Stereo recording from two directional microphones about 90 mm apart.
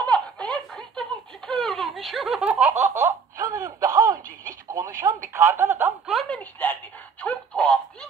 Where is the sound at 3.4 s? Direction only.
40° right (ahead or behind); by 5.9 s 25° right (ahead or behind).